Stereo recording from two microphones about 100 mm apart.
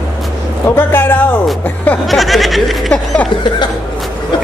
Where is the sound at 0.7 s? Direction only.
20° left (ahead or behind).